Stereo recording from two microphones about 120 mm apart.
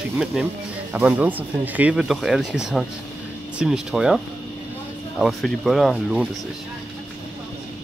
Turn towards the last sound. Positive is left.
turn(degrees=0)  # may be behind; listen again after turning